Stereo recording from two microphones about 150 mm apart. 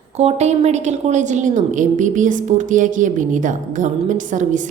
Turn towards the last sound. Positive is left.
turn(degrees=-55)  # may be behind; listen again after turning